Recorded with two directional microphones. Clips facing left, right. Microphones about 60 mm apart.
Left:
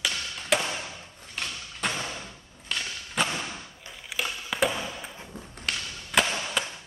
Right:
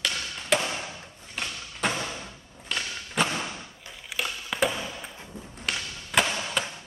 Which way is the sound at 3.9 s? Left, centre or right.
Centre.